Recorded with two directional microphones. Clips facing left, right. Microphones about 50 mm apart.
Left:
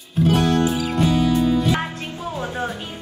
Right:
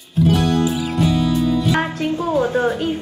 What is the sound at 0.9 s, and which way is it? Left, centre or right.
Music, centre.